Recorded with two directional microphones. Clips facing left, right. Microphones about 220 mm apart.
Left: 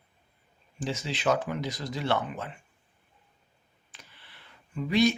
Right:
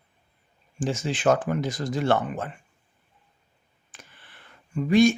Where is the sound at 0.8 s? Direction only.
50° right (ahead or behind).